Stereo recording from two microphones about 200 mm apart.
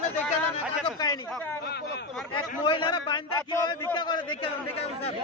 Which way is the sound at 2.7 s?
25° left (ahead or behind).